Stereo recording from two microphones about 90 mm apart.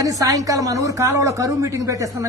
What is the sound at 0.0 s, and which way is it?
A woman's voice, 40° right (ahead or behind).